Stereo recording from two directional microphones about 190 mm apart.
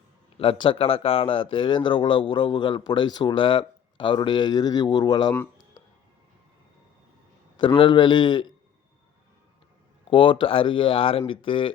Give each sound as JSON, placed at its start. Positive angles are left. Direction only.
{"t": 0.3, "sound": "speech", "side_deg": 30}
{"t": 7.6, "sound": "speech", "side_deg": 25}
{"t": 10.1, "sound": "speech", "side_deg": 25}